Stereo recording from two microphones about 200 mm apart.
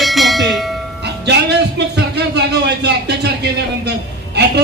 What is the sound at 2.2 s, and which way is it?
A man's voice, 55° right (ahead or behind).